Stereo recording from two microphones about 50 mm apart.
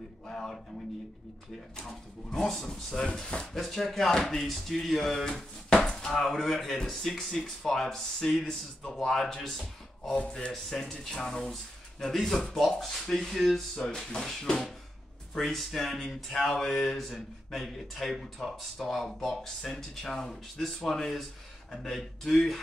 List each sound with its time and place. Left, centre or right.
0.3 s speech: centre
1.9 s speech: centre
3.2 s speech: left
3.5 s speech: centre
5.2 s speech: centre
10.1 s speech: centre
10.5 s speech: centre